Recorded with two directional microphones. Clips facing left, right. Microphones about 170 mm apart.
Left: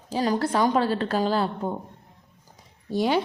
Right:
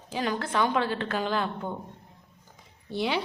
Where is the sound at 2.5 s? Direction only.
40° left (ahead or behind).